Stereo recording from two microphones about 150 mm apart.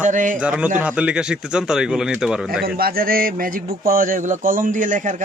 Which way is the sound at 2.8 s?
85° right.